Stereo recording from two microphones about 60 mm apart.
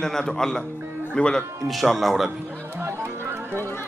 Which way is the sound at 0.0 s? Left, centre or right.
Centre.